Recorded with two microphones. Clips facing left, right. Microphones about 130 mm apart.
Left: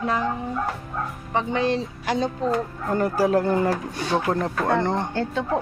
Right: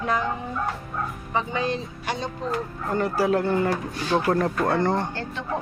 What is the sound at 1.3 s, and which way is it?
Speech, 75° left (ahead or behind).